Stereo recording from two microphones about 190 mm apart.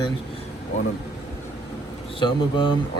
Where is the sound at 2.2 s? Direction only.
25° left (ahead or behind).